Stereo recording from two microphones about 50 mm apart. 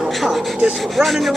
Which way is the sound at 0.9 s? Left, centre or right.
Centre.